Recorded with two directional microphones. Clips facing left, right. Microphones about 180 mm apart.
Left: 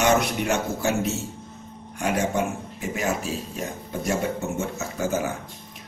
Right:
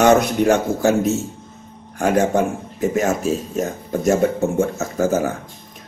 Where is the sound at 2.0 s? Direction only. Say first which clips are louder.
Right 7 dB; 45° right (ahead or behind).